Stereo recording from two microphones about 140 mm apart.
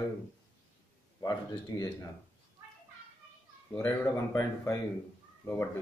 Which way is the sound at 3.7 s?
15° left (ahead or behind).